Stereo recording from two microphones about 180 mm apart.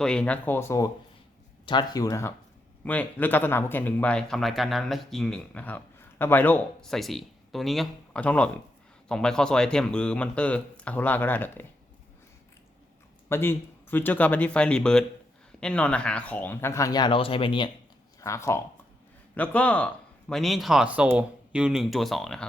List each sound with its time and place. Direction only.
0.0 s speech: 5° left (ahead or behind)
13.2 s speech: 10° left (ahead or behind); by 17.7 s 30° left (ahead or behind)
18.2 s speech: 15° left (ahead or behind)